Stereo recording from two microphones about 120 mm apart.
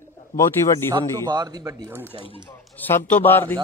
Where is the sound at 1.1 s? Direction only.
35° right (ahead or behind).